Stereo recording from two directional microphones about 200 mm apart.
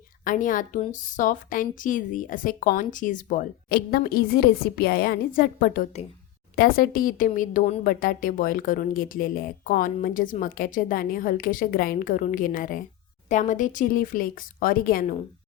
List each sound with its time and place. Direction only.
0.3 s a woman's voice: 40° left (ahead or behind)